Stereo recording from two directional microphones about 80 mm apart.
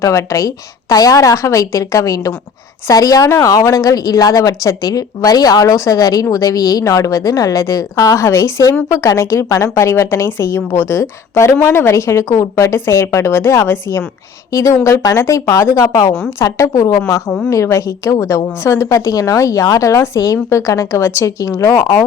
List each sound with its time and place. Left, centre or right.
0.0 s a woman's voice: left